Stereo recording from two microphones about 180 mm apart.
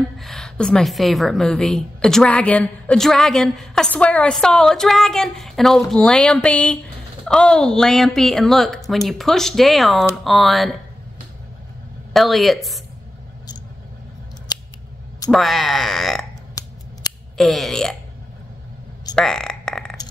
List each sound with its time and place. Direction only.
0.2 s a woman's voice: 5° left (ahead or behind)
12.1 s a woman's voice: centre (ahead or behind)
14.5 s scissors: 20° left (ahead or behind)
15.3 s a woman's voice: centre (ahead or behind)
17.4 s a woman's voice: centre (ahead or behind)
19.1 s a sound: 5° left (ahead or behind)